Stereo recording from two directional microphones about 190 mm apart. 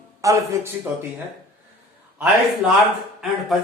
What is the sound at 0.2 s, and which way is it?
Speech, 15° right (ahead or behind).